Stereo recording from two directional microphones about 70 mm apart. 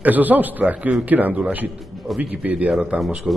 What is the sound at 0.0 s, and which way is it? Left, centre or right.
A man's voice, right.